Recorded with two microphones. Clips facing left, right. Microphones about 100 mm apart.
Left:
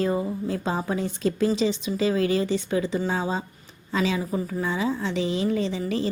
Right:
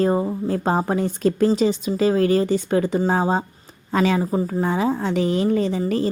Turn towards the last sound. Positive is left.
turn(degrees=-45)  # may be behind; listen again after turning